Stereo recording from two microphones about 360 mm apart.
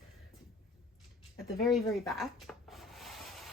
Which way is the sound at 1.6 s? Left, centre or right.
Centre.